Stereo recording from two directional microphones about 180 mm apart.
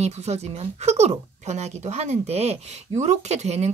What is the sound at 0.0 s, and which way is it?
Speech, 35° right (ahead or behind).